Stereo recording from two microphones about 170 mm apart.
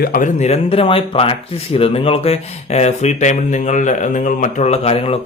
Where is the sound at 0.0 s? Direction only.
60° left (ahead or behind).